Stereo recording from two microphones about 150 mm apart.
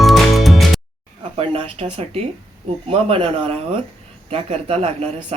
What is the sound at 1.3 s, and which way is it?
Speech, 40° right (ahead or behind).